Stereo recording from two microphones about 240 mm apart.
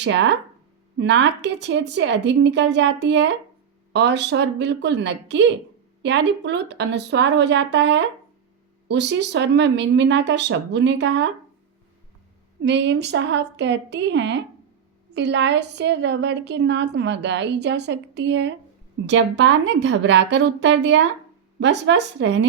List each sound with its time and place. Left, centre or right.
0.0 s a woman's voice: right
12.6 s a woman's voice: right